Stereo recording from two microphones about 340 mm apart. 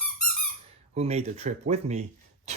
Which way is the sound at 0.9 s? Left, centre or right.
Centre.